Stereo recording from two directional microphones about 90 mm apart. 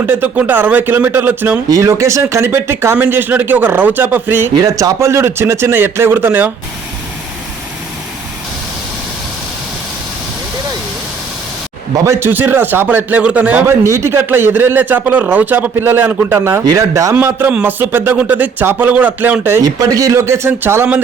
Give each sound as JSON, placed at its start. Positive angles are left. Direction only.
{"t": 0.0, "sound": "speech", "side_deg": -20}
{"t": 1.7, "sound": "speech", "side_deg": -35}
{"t": 4.5, "sound": "speech", "side_deg": -40}
{"t": 12.0, "sound": "a man's voice", "side_deg": -35}
{"t": 12.3, "sound": "speech", "side_deg": -20}
{"t": 13.7, "sound": "a man's voice", "side_deg": -30}
{"t": 17.2, "sound": "speech", "side_deg": -25}
{"t": 19.6, "sound": "speech", "side_deg": -45}
{"t": 20.1, "sound": "speech", "side_deg": -30}